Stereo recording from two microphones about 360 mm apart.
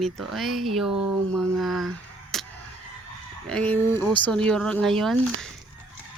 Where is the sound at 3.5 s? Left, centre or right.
Centre.